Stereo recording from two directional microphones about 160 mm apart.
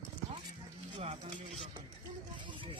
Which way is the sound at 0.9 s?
40° right (ahead or behind).